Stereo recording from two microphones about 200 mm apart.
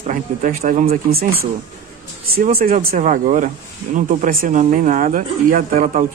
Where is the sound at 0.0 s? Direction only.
40° right (ahead or behind).